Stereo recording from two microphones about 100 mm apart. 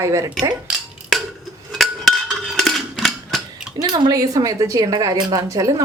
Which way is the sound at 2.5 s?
Centre (ahead or behind).